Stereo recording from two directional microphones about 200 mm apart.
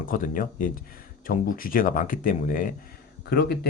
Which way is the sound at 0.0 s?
40° left (ahead or behind).